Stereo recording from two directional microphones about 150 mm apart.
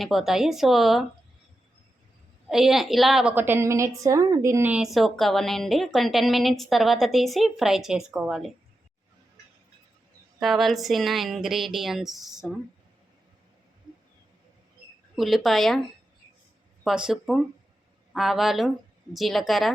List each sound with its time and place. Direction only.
0.0 s a woman's voice: centre (ahead or behind)
2.5 s a woman's voice: centre (ahead or behind)
3.3 s a woman's voice: 15° right (ahead or behind)
4.7 s a woman's voice: centre (ahead or behind)
10.4 s a woman's voice: centre (ahead or behind)
15.1 s a woman's voice: centre (ahead or behind)
16.8 s a woman's voice: 5° right (ahead or behind)